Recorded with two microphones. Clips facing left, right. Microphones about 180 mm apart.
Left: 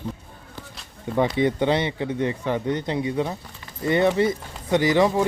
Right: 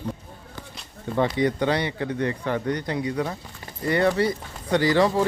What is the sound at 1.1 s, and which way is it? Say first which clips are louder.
Speech: left 1 dB; 15° left (ahead or behind).